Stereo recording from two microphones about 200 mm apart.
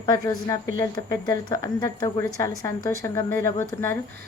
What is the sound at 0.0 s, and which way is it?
A woman's voice, 20° left (ahead or behind).